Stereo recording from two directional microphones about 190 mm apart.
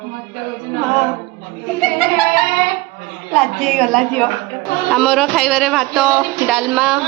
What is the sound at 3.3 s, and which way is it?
Speech, centre (ahead or behind).